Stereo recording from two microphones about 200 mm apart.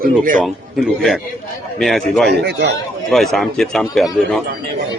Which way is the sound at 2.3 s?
55° right (ahead or behind).